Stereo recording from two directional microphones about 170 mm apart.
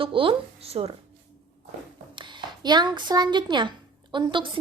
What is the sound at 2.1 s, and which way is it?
Speech, 25° right (ahead or behind).